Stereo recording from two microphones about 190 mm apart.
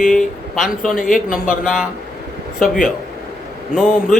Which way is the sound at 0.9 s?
45° left (ahead or behind).